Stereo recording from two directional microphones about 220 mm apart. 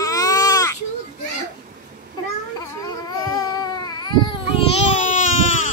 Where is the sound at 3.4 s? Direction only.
20° left (ahead or behind); by 5.3 s 35° left (ahead or behind).